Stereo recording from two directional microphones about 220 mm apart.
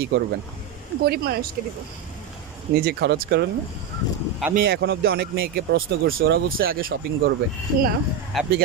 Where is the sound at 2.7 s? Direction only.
45° right (ahead or behind).